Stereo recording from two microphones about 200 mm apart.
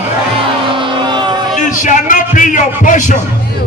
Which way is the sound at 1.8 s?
40° left (ahead or behind).